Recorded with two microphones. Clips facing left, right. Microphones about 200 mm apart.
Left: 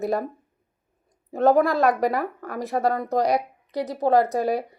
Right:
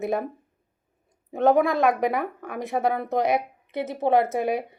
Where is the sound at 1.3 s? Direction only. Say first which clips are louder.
Left 1 dB; centre (ahead or behind).